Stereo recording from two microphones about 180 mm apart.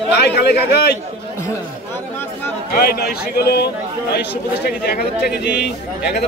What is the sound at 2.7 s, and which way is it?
Speech, 60° left (ahead or behind).